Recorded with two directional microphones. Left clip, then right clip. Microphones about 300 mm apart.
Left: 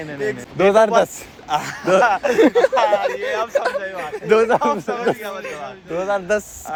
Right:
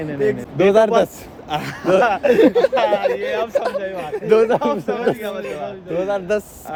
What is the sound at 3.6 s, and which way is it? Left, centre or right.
A man's voice, left.